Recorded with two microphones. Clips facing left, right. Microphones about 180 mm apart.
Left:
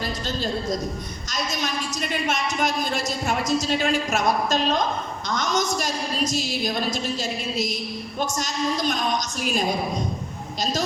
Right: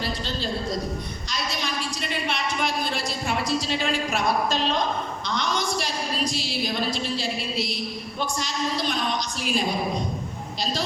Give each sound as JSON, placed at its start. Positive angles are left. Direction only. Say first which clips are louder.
{"t": 1.3, "sound": "a woman's voice", "louder": "left 3 dB", "side_deg": 45}